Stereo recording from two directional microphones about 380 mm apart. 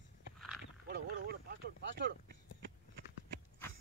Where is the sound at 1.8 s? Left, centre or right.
Right.